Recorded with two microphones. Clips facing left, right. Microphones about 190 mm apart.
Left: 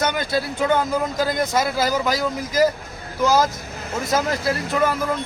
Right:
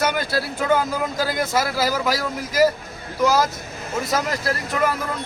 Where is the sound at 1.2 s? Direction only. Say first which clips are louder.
Even; 20° left (ahead or behind).